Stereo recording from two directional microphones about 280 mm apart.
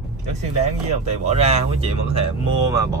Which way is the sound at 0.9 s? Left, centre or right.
Right.